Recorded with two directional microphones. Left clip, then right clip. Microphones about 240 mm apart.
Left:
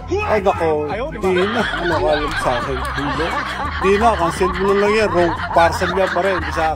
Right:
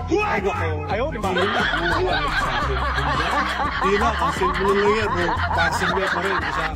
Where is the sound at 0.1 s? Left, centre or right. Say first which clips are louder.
Left 3 dB; centre.